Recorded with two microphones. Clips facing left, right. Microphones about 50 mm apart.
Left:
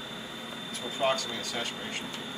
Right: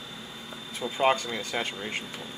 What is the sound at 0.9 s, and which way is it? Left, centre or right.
Speech, right.